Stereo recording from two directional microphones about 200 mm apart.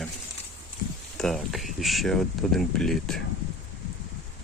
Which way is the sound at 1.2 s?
Centre (ahead or behind).